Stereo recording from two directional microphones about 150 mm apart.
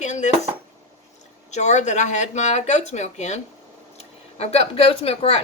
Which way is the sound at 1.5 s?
50° left (ahead or behind).